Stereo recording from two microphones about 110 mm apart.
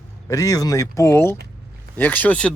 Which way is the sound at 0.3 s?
30° left (ahead or behind).